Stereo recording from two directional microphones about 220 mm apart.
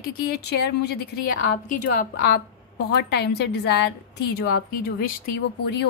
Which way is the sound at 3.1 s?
50° left (ahead or behind).